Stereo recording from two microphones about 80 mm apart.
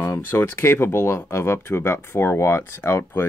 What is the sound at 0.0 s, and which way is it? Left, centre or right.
Speech, left.